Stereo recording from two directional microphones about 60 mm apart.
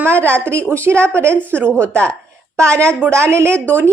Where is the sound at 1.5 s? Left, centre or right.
Left.